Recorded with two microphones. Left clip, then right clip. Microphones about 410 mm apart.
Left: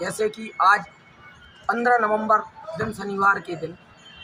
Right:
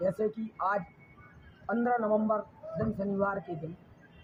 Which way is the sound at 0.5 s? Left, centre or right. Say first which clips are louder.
Left 16 dB; right.